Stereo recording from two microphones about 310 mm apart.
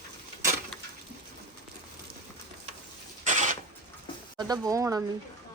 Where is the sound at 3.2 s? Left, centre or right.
Right.